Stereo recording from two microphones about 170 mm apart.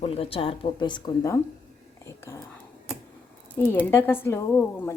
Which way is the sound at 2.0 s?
15° left (ahead or behind).